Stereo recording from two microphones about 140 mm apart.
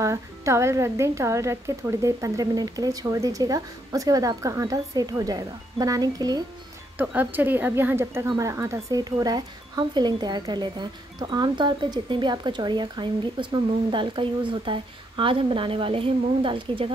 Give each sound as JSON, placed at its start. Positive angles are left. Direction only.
{"t": 0.0, "sound": "a woman's voice", "side_deg": -20}
{"t": 7.0, "sound": "a woman's voice", "side_deg": -15}